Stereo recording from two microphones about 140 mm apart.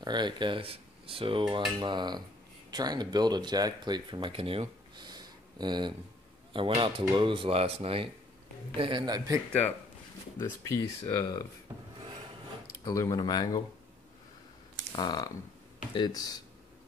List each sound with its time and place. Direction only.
0.0 s speech: 30° right (ahead or behind)
9.5 s speech: 10° left (ahead or behind)
11.7 s rub: 15° right (ahead or behind)
12.8 s speech: 25° left (ahead or behind)
14.9 s speech: 30° left (ahead or behind)